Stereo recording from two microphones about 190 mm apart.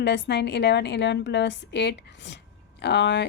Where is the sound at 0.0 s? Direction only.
65° left (ahead or behind).